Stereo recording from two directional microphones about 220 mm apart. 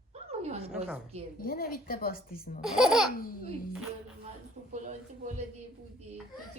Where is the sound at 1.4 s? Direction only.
40° left (ahead or behind).